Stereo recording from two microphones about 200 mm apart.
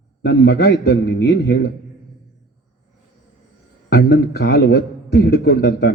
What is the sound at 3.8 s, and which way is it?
A man's voice, 55° left (ahead or behind).